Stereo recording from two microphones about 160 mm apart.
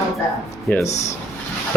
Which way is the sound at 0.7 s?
15° left (ahead or behind).